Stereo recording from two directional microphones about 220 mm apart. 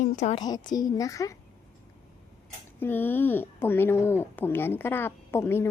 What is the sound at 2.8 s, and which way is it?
Speech, 10° left (ahead or behind).